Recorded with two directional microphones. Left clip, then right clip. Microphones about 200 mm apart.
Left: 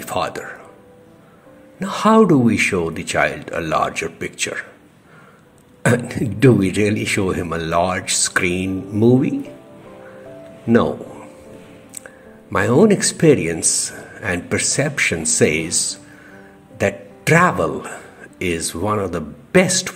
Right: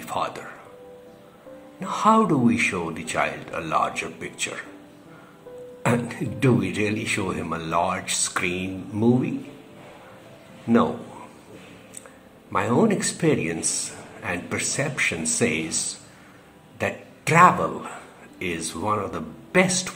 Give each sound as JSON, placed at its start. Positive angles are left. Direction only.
{"t": 0.0, "sound": "speech", "side_deg": 35}
{"t": 1.8, "sound": "speech", "side_deg": 35}
{"t": 5.8, "sound": "speech", "side_deg": 35}
{"t": 12.5, "sound": "a man's voice", "side_deg": 35}